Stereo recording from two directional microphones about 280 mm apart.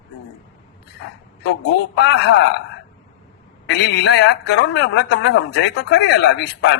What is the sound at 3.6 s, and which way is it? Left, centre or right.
A man's voice, left.